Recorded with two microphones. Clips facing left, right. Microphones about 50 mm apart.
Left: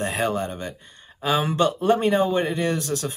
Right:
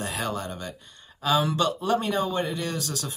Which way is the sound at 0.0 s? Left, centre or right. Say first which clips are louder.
Left 6 dB; left.